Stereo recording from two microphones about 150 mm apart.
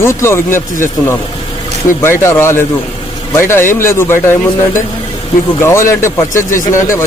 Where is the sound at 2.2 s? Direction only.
15° left (ahead or behind).